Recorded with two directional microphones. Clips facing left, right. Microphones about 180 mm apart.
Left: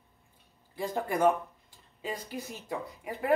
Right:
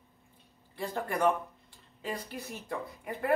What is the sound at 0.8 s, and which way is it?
Speech, 15° left (ahead or behind).